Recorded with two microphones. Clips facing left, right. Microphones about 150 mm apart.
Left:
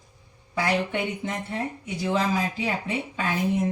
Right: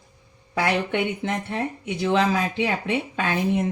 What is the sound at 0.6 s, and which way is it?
Speech, 70° right (ahead or behind).